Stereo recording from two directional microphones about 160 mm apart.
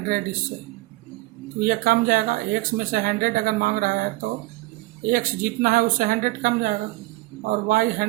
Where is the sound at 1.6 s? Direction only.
65° right (ahead or behind).